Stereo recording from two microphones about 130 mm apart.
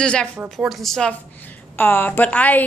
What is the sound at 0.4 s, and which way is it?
Speech, 10° right (ahead or behind).